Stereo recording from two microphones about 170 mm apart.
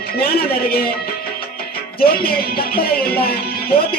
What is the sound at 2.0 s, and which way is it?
Music, 65° left (ahead or behind).